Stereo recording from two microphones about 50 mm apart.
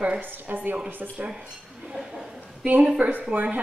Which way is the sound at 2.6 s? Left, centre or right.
Right.